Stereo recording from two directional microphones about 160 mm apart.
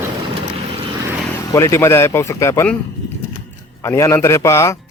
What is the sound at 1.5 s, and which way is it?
Speech, 15° left (ahead or behind).